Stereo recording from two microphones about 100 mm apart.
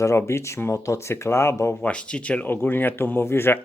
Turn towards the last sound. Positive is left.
turn(degrees=25)  # may be behind; listen again after turning